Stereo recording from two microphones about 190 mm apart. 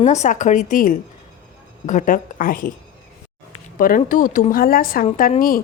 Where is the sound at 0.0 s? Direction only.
40° left (ahead or behind).